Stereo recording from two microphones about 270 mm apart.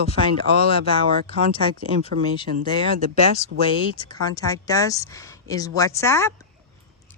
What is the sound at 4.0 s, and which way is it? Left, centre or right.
A woman's voice, centre.